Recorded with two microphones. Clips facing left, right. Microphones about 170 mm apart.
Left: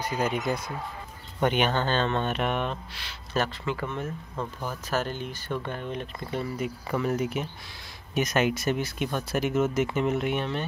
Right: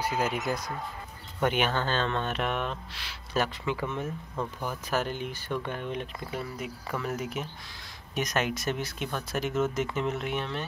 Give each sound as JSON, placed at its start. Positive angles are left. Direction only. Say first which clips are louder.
{"t": 0.0, "sound": "speech", "louder": "left 1 dB", "side_deg": -5}
{"t": 4.0, "sound": "speech", "louder": "even", "side_deg": 0}
{"t": 4.6, "sound": "speech", "louder": "left 1 dB", "side_deg": -10}